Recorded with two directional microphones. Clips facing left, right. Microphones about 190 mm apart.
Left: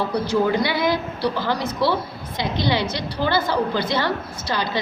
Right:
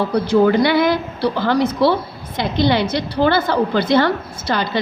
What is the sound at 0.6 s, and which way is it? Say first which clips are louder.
Speech: right 6 dB; 60° right (ahead or behind).